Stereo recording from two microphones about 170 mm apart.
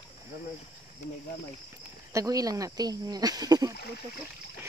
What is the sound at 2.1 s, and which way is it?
Speech, 20° right (ahead or behind).